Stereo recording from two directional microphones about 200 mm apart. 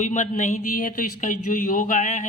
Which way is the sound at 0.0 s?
35° left (ahead or behind).